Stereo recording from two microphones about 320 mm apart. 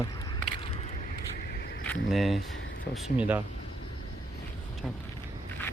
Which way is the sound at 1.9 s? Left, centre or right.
Centre.